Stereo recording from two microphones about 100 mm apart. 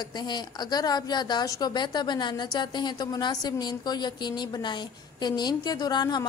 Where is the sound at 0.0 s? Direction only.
45° left (ahead or behind).